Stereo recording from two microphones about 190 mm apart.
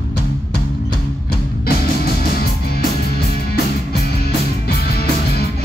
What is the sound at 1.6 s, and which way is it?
Music, 55° left (ahead or behind).